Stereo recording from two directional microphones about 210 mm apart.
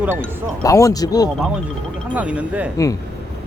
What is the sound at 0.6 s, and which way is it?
Speech, 15° left (ahead or behind).